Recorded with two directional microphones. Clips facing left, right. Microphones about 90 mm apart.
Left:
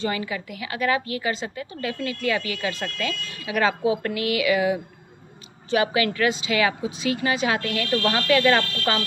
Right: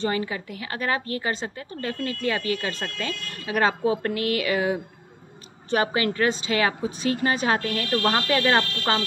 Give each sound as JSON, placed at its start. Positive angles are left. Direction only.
{"t": 0.0, "sound": "a woman's voice", "side_deg": -35}
{"t": 8.4, "sound": "speech", "side_deg": -25}